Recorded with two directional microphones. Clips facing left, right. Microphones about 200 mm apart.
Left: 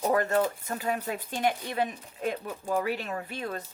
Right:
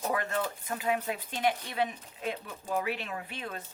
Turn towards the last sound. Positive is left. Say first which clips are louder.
# left 5 dB
turn(degrees=40)  # may be behind; listen again after turning